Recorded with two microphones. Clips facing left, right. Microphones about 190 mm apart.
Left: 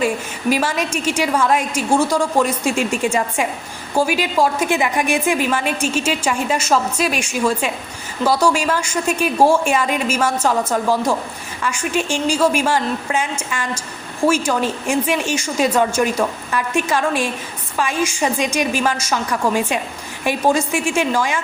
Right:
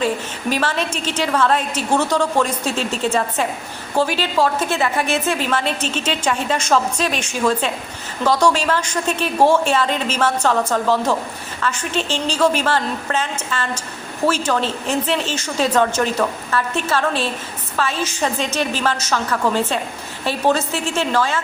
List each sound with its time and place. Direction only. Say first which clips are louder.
0.5 s a woman's voice: left 1 dB; 10° left (ahead or behind)